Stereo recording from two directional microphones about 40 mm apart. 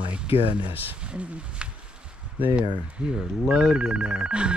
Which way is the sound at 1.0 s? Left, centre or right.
Right.